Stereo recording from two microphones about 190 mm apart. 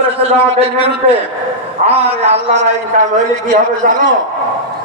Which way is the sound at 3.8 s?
45° right (ahead or behind).